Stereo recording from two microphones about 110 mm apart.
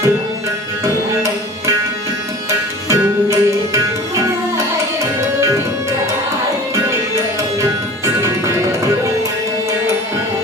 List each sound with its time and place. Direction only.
2.9 s music: 25° right (ahead or behind)